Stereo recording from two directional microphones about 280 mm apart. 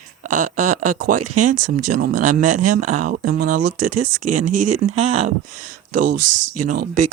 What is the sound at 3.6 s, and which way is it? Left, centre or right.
Speech, right.